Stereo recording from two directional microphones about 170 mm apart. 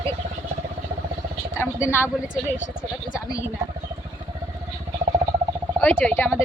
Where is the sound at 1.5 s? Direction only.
15° left (ahead or behind).